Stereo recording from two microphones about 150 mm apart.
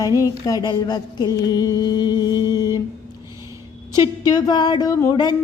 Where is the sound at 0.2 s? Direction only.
25° left (ahead or behind).